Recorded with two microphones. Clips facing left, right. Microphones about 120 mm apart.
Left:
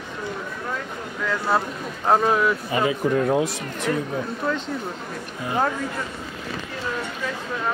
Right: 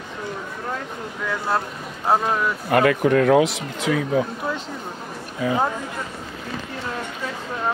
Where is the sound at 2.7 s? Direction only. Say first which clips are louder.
Right 4 dB; 65° right (ahead or behind); by 4.0 s 90° right.